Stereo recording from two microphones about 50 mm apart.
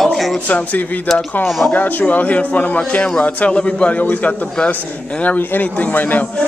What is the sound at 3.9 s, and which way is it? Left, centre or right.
A man's voice, left.